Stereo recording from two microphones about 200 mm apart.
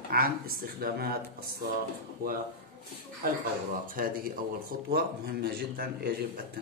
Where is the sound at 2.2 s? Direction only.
45° right (ahead or behind).